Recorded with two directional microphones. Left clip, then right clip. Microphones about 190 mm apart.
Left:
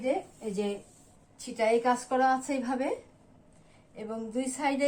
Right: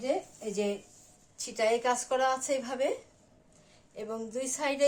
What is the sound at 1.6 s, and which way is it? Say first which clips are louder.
A woman's voice: left 2 dB; 50° right (ahead or behind).